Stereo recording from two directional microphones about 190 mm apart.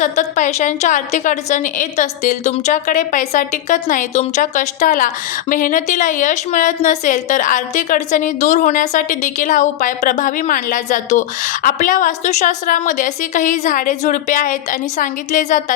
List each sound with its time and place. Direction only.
0.0 s a woman's voice: 40° left (ahead or behind)